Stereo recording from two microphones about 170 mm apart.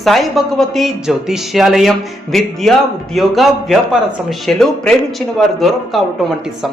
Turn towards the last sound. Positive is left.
turn(degrees=0)  # may be behind; listen again after turning